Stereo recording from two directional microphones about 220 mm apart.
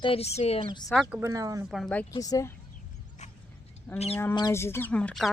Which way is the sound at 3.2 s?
35° left (ahead or behind).